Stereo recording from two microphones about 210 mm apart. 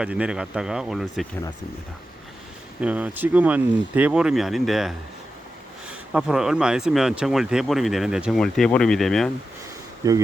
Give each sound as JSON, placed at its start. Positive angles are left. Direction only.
{"t": 0.0, "sound": "speech", "side_deg": -5}
{"t": 2.8, "sound": "speech", "side_deg": -5}
{"t": 6.1, "sound": "speech", "side_deg": -5}
{"t": 10.0, "sound": "speech", "side_deg": -15}